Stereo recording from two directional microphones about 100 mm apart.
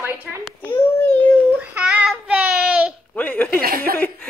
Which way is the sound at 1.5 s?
10° right (ahead or behind).